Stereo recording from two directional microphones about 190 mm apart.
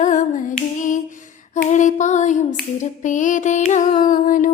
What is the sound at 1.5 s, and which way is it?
Female singing, 40° left (ahead or behind).